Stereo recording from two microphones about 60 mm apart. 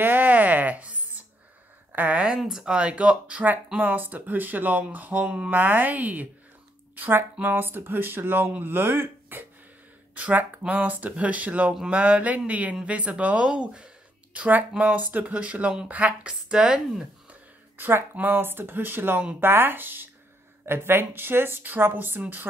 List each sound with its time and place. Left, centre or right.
0.0 s a sound: right
1.9 s a woman's voice: right
2.3 s speech: centre
3.8 s speech: right
5.5 s speech: right
7.0 s speech: right
10.1 s speech: right
17.7 s speech: right